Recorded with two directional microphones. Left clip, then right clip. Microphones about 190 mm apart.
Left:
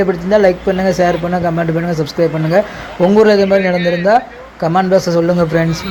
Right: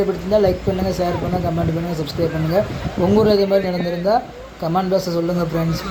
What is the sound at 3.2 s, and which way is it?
Speech, 15° left (ahead or behind).